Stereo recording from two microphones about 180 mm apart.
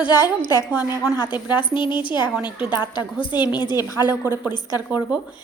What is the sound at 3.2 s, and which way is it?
Speech, 25° left (ahead or behind).